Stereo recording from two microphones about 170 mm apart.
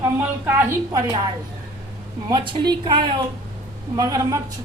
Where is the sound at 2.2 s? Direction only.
25° right (ahead or behind).